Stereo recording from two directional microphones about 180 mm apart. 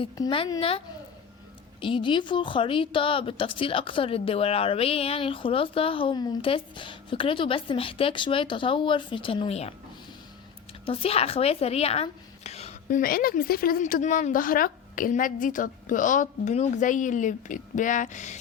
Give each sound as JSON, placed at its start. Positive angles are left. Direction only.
{"t": 0.0, "sound": "a woman's voice", "side_deg": 30}
{"t": 1.8, "sound": "a woman's voice", "side_deg": 30}
{"t": 10.8, "sound": "speech", "side_deg": 30}
{"t": 13.0, "sound": "speech", "side_deg": 55}